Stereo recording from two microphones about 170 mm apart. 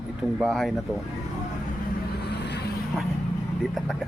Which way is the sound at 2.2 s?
80° left.